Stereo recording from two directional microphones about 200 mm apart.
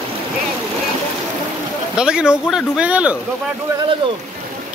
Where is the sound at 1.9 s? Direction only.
5° right (ahead or behind).